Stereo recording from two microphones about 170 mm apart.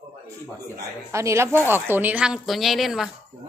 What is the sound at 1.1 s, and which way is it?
A woman's voice, 15° right (ahead or behind).